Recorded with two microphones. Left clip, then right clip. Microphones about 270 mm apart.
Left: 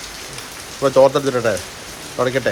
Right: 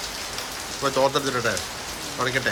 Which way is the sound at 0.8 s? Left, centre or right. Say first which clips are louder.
Left 9 dB; centre.